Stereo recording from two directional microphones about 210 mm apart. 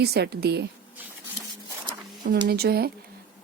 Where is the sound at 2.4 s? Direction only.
50° right (ahead or behind).